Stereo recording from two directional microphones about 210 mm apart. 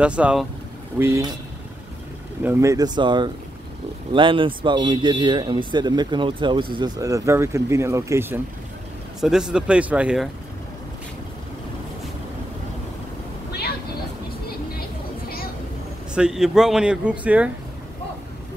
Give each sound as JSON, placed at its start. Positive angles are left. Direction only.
{"t": 0.0, "sound": "speech", "side_deg": -5}
{"t": 2.4, "sound": "speech", "side_deg": -10}
{"t": 13.5, "sound": "vehicle", "side_deg": 50}
{"t": 14.8, "sound": "vehicle", "side_deg": 45}
{"t": 16.2, "sound": "speech", "side_deg": 0}